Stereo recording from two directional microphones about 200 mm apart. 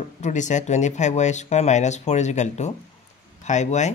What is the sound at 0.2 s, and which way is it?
Speech, 35° left (ahead or behind).